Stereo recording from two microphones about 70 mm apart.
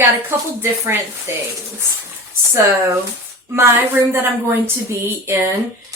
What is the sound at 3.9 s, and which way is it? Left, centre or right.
Speech, right.